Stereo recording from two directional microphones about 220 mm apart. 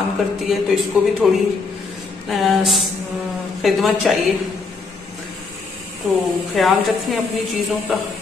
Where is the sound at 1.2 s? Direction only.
Centre (ahead or behind).